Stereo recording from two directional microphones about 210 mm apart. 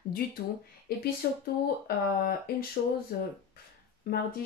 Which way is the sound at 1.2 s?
50° left (ahead or behind).